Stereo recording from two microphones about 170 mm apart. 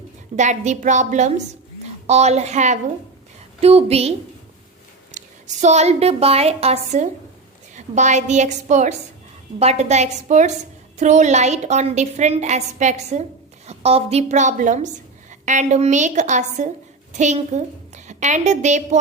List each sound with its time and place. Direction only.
0.3 s a woman's voice: 45° right (ahead or behind)
5.1 s a woman's voice: 45° right (ahead or behind)